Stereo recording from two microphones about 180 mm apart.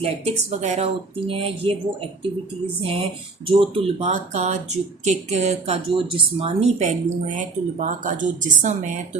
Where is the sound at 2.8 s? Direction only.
30° right (ahead or behind).